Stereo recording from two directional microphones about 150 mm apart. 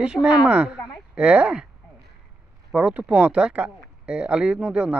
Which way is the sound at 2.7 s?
5° right (ahead or behind).